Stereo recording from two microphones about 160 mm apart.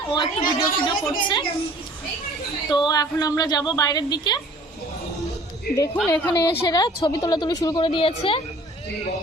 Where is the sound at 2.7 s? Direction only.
25° left (ahead or behind).